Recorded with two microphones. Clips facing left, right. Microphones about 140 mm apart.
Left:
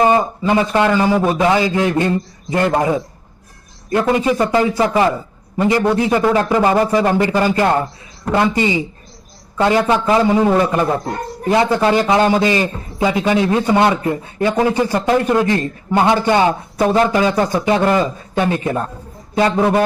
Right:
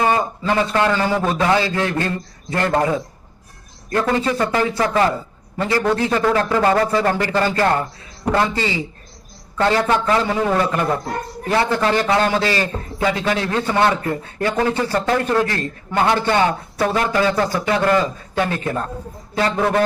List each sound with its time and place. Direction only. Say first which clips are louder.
0.0 s a man's voice: left 5 dB; 20° left (ahead or behind)